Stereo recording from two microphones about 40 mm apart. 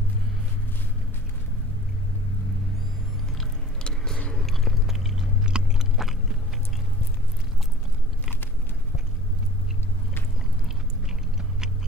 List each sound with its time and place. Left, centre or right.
3.8 s a sound: centre
4.3 s biting: centre
5.2 s chewing: centre
5.9 s biting: centre